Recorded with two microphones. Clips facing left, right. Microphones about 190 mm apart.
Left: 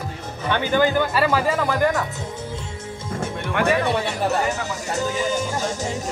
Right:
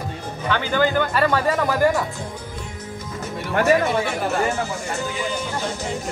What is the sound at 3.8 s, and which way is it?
Music, 40° left (ahead or behind).